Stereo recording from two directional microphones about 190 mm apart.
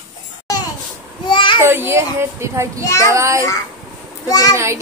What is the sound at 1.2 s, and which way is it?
Child singing, 25° left (ahead or behind).